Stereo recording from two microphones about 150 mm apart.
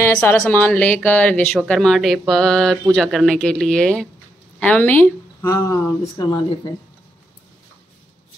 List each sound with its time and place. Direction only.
0.0 s speech: 15° left (ahead or behind)